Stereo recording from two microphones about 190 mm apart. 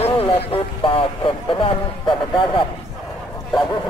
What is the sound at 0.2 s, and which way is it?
Speech, 30° left (ahead or behind).